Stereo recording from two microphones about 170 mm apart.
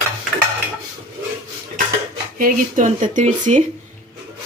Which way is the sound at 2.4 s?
50° right (ahead or behind).